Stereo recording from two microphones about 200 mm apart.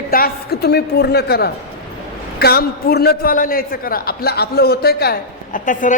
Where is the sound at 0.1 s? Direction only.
50° left (ahead or behind).